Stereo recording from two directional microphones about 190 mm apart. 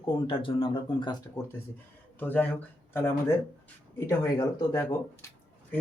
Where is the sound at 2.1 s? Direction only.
10° left (ahead or behind).